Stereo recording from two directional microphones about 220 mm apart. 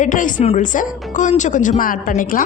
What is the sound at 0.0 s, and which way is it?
A woman's voice, 35° left (ahead or behind).